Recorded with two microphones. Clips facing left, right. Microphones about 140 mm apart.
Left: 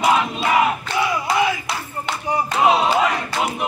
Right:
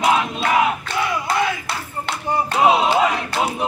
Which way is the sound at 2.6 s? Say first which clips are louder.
Right 1 dB; 5° right (ahead or behind).